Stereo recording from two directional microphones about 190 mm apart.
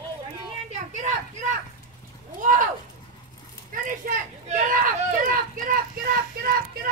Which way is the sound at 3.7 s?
45° right (ahead or behind).